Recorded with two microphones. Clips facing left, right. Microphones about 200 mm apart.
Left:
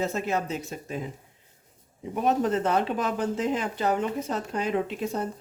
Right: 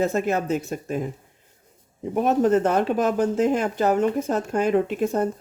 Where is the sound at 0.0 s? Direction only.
50° right (ahead or behind).